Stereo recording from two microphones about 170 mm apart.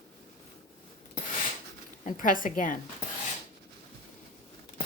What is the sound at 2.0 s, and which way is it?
Speech, 50° left (ahead or behind).